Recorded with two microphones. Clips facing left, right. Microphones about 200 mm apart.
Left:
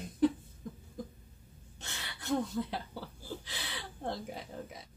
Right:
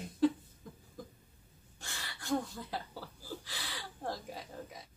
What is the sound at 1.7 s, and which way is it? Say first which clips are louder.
Gasp: left 1 dB; 20° left (ahead or behind).